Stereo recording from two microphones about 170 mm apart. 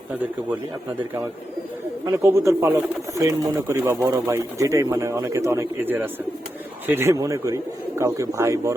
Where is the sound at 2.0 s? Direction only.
15° right (ahead or behind).